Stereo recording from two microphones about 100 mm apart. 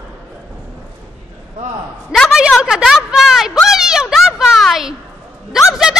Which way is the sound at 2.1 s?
Centre (ahead or behind).